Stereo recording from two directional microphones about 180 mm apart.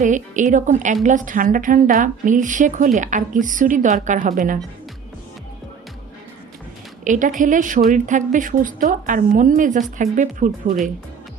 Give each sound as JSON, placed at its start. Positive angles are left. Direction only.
{"t": 0.0, "sound": "speech", "side_deg": -45}
{"t": 7.0, "sound": "speech", "side_deg": -45}